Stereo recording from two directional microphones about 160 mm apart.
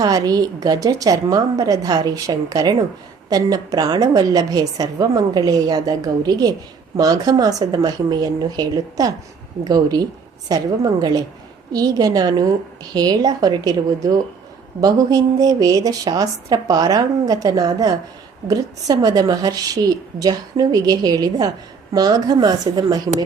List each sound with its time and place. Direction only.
0.0 s a woman's voice: 25° right (ahead or behind)